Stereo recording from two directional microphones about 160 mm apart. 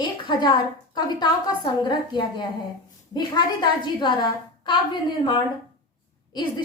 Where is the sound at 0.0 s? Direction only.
25° left (ahead or behind).